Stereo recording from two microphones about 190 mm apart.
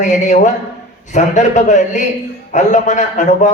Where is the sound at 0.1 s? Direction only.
40° left (ahead or behind).